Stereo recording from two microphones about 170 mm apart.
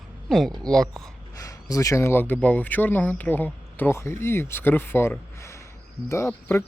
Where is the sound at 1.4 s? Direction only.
20° left (ahead or behind).